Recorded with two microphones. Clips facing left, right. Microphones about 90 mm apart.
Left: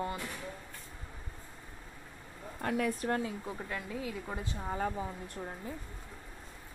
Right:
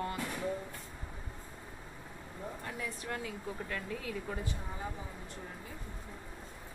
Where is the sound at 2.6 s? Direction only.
85° left.